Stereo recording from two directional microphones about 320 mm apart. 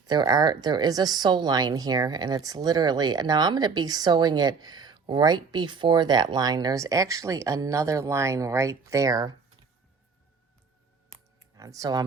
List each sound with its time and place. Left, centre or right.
0.0 s speech: centre
11.1 s clicking: centre